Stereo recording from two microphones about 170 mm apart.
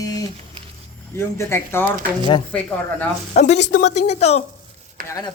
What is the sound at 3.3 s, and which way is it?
A woman's voice, 45° left (ahead or behind).